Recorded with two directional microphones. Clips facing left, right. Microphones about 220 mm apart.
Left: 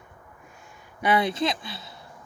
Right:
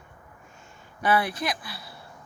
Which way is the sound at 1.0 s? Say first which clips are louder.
Left 2 dB; 20° left (ahead or behind).